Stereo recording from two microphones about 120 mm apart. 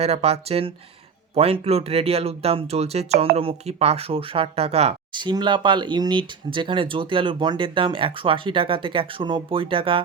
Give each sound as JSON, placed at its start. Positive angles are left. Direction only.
{"t": 0.0, "sound": "speech", "side_deg": -60}
{"t": 5.1, "sound": "speech", "side_deg": -40}